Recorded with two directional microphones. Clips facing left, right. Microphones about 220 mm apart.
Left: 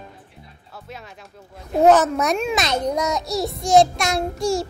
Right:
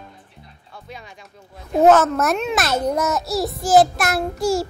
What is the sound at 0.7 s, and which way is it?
A child's voice, 5° left (ahead or behind).